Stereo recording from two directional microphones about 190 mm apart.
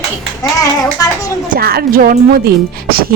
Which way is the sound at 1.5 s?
55° right (ahead or behind).